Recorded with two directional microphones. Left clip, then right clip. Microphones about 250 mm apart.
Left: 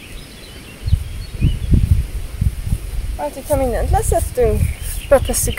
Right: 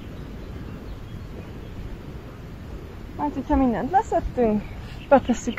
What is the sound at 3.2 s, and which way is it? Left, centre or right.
Speech, left.